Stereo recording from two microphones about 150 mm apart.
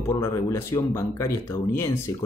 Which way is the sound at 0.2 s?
20° left (ahead or behind).